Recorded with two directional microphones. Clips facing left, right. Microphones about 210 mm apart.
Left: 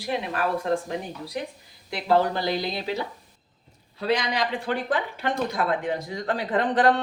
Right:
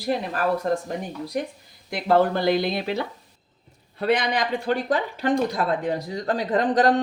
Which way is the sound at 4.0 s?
55° right (ahead or behind).